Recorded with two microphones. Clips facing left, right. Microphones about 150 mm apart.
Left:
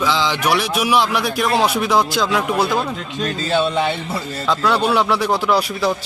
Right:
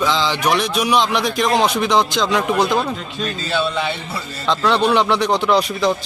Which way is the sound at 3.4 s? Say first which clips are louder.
Left 3 dB; 45° left (ahead or behind).